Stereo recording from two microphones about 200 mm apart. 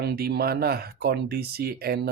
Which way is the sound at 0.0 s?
50° right (ahead or behind).